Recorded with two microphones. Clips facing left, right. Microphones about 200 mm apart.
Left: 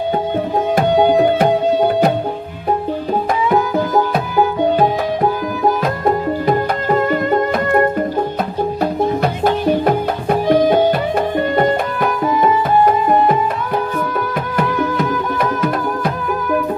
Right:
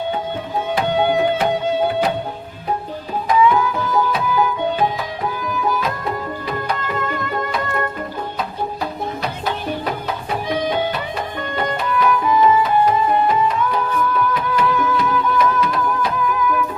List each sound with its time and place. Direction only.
0.8 s music: 40° left (ahead or behind)
3.5 s music: 40° left (ahead or behind)